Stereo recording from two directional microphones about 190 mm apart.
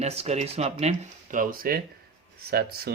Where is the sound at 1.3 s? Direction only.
50° right (ahead or behind).